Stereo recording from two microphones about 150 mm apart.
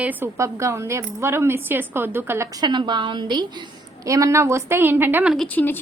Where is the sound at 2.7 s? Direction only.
30° right (ahead or behind); by 5.3 s 10° right (ahead or behind).